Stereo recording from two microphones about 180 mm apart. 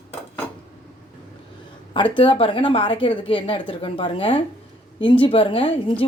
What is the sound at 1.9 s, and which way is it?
A woman's voice, 30° left (ahead or behind).